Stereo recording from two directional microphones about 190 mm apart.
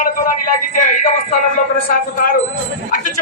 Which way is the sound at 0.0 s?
45° left (ahead or behind).